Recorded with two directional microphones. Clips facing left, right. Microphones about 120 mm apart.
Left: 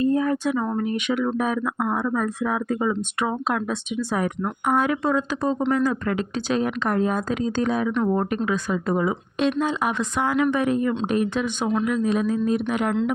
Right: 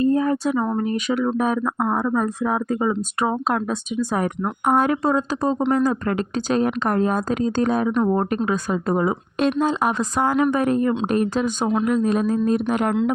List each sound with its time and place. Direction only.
0.0 s speech: 35° right (ahead or behind)